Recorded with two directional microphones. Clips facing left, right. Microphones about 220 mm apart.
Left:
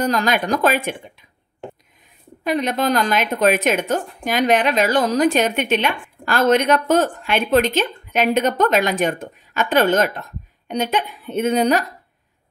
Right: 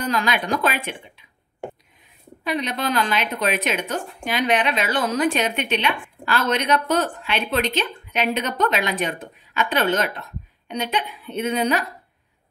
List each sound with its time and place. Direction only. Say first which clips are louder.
0.0 s a woman's voice: left 4 dB; 45° left (ahead or behind)
2.4 s a woman's voice: left 5 dB; 45° left (ahead or behind)